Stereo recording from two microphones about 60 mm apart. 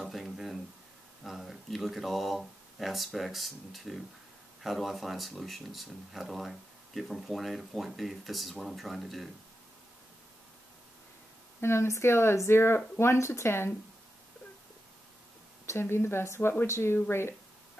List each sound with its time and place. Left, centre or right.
0.0 s a sound: centre
1.2 s speech: centre
11.6 s speech: left
15.6 s speech: left